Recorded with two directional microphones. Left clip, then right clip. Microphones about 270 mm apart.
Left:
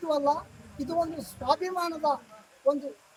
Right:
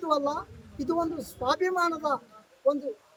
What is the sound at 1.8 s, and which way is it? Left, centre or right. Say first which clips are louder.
Speech: right 1 dB; centre.